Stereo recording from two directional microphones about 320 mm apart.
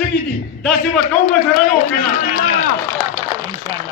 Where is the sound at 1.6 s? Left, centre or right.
Left.